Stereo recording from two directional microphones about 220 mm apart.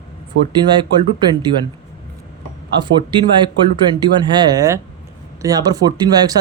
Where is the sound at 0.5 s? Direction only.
20° right (ahead or behind).